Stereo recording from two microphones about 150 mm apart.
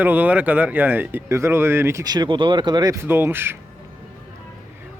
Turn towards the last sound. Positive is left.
turn(degrees=-15)  # may be behind; listen again after turning